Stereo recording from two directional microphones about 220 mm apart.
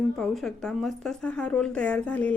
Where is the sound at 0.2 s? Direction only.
Centre (ahead or behind).